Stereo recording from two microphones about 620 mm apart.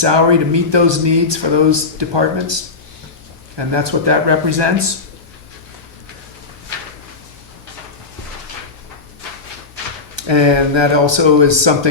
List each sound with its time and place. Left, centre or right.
0.0 s speech: right
3.6 s speech: right
10.2 s speech: right